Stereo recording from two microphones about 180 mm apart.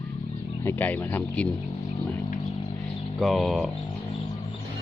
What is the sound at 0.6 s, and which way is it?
Speech, 10° left (ahead or behind).